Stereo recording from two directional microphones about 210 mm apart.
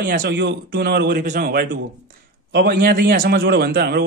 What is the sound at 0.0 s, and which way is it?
A man's voice, 45° right (ahead or behind).